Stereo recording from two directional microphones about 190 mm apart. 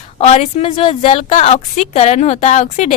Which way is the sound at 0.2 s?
35° left (ahead or behind).